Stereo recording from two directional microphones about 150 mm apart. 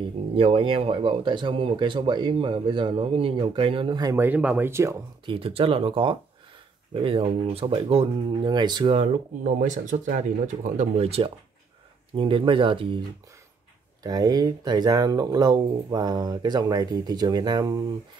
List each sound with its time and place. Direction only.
0.4 s speech: 40° right (ahead or behind)
4.3 s speech: 10° right (ahead or behind)
5.2 s speech: 35° right (ahead or behind)
14.0 s speech: 25° right (ahead or behind)